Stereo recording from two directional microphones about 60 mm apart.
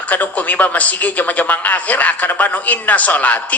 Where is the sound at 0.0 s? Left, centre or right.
Left.